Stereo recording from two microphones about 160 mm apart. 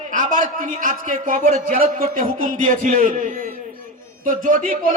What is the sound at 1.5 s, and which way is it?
Speech, 40° right (ahead or behind).